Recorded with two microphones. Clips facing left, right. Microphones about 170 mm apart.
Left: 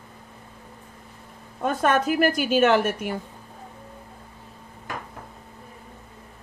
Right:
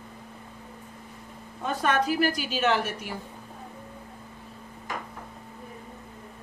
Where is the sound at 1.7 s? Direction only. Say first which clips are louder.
Left 4 dB; 50° left (ahead or behind).